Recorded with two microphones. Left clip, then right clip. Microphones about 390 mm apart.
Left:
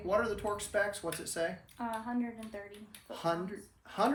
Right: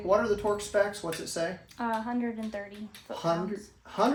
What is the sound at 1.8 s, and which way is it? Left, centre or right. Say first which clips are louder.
Speech: right 7 dB; right.